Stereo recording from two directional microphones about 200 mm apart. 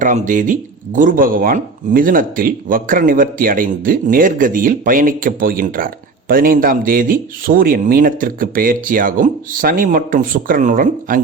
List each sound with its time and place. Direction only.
0.0 s speech: 40° right (ahead or behind)